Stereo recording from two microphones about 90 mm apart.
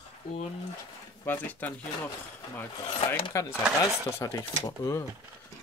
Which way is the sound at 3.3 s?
35° left (ahead or behind).